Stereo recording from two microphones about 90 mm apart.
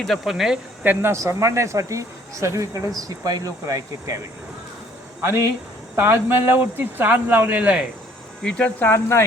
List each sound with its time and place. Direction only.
0.0 s speech: centre (ahead or behind)
0.9 s speech: 30° right (ahead or behind)
5.2 s a man's voice: 30° right (ahead or behind)
8.4 s speech: 15° left (ahead or behind)